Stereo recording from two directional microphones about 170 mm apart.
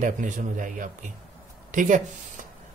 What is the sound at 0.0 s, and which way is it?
Speech, 50° right (ahead or behind).